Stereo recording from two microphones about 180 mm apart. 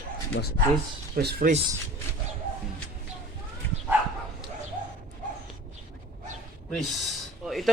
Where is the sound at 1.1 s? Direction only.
60° right (ahead or behind).